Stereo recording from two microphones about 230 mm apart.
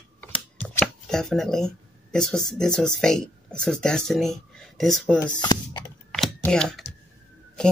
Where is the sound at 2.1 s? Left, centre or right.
Centre.